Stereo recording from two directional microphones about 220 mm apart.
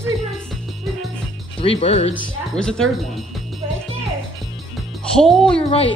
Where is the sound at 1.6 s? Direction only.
25° left (ahead or behind).